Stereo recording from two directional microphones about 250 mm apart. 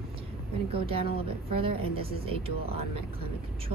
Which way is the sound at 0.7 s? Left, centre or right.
Right.